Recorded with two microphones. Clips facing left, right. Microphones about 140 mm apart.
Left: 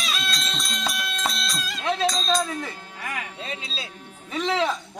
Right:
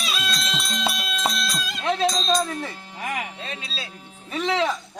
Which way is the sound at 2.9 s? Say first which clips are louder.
Right 5 dB; 20° right (ahead or behind).